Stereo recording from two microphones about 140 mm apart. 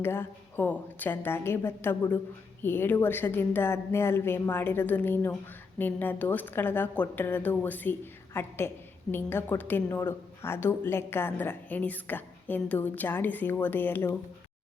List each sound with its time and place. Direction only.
0.0 s a woman's voice: 15° left (ahead or behind)